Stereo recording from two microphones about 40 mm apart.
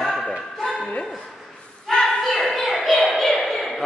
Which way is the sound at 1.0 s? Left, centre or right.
Centre.